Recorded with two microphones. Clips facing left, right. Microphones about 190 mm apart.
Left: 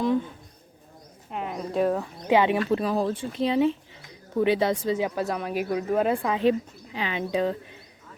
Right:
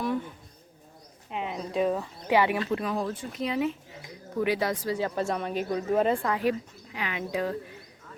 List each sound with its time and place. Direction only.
1.3 s a woman's voice: centre (ahead or behind)
2.2 s speech: 20° left (ahead or behind)
5.1 s a woman's voice: 5° left (ahead or behind)
6.2 s speech: 25° left (ahead or behind)